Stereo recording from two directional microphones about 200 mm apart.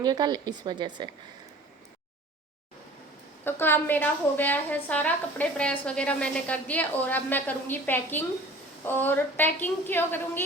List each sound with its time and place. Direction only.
0.0 s speech: 20° right (ahead or behind)
3.4 s a woman's voice: 10° left (ahead or behind)